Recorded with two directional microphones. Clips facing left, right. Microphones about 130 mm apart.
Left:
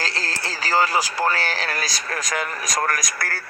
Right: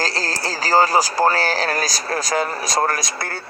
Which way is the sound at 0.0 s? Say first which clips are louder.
Right 5 dB; 40° right (ahead or behind).